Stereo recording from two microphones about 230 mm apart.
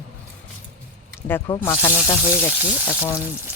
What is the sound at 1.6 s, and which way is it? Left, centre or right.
Speech, centre.